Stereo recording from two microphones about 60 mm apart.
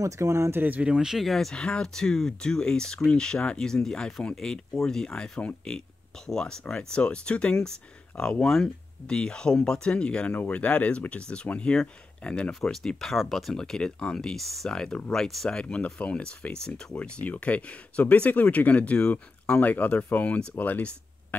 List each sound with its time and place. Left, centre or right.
0.0 s speech: right
0.6 s speech: right
0.8 s speech: centre
1.2 s speech: centre
1.5 s speech: centre
12.6 s speech: centre; by 20.8 s left